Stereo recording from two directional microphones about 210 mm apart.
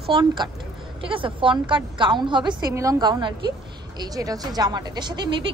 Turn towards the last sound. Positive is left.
turn(degrees=-20)  # may be behind; listen again after turning